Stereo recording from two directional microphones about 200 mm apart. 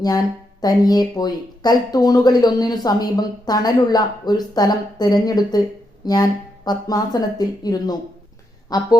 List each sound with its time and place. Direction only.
0.6 s speech: 20° left (ahead or behind)